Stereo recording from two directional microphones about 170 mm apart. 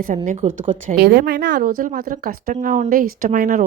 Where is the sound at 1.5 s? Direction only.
55° right (ahead or behind).